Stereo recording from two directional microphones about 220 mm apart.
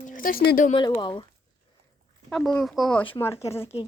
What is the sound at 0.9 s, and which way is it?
Speech, 20° left (ahead or behind).